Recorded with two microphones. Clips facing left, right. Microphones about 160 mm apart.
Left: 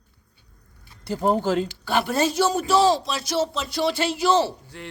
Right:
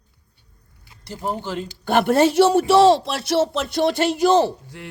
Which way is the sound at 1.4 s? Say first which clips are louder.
Left 6 dB; 90° left.